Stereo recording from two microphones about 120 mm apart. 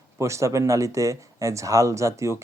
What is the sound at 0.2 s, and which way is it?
Speech, 25° right (ahead or behind).